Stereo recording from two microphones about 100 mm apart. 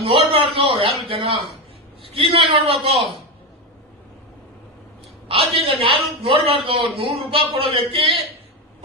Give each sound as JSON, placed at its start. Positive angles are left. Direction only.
{"t": 0.0, "sound": "a man's voice", "side_deg": -70}
{"t": 5.3, "sound": "a man's voice", "side_deg": -70}